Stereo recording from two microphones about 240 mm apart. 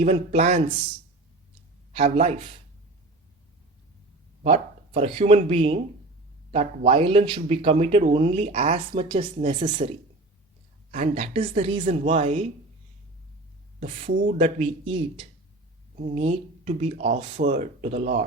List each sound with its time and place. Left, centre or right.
0.0 s speech: right
1.9 s speech: right
4.4 s speech: right
10.9 s speech: right
13.7 s speech: right